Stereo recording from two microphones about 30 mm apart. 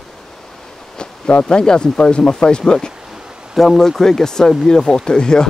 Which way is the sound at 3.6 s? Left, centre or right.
Centre.